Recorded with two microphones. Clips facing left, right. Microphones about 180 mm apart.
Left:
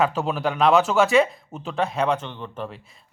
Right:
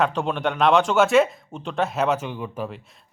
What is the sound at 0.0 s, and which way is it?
Speech, 5° left (ahead or behind).